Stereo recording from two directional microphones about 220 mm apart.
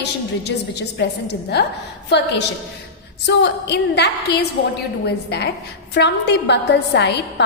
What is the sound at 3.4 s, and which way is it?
A woman's voice, 50° left (ahead or behind).